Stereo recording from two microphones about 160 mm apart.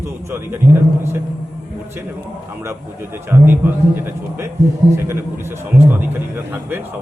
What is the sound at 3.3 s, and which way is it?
A man's voice, 15° right (ahead or behind).